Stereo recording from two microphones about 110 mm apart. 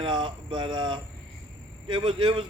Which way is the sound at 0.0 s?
50° right (ahead or behind).